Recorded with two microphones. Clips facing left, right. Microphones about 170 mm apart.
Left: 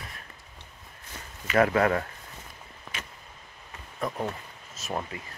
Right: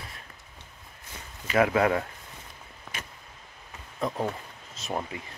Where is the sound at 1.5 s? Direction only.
10° right (ahead or behind).